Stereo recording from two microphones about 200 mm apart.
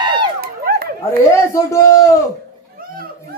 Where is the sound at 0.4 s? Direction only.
50° right (ahead or behind).